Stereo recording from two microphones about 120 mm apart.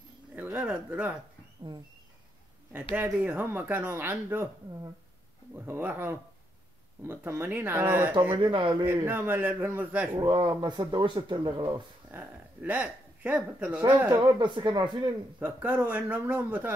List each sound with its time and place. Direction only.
0.4 s a sound: 10° right (ahead or behind)
3.1 s a man's voice: 15° right (ahead or behind)
5.7 s a man's voice: 15° right (ahead or behind)
8.4 s speech: 45° right (ahead or behind)
8.8 s a man's voice: 15° right (ahead or behind)
10.1 s speech: 35° right (ahead or behind)
12.1 s speech: 15° right (ahead or behind)
14.1 s speech: 40° right (ahead or behind)
15.3 s a man's voice: 15° right (ahead or behind)